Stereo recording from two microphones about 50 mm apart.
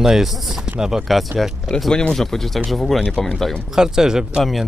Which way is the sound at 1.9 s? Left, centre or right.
Centre.